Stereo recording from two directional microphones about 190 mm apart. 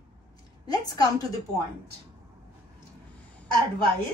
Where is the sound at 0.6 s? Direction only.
20° left (ahead or behind).